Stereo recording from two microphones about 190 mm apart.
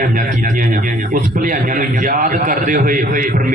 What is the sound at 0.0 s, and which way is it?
Speech, 45° right (ahead or behind).